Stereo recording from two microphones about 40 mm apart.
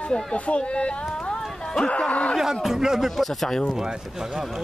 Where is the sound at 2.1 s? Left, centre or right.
Left.